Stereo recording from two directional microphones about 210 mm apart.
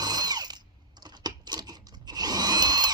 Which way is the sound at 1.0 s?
20° right (ahead or behind).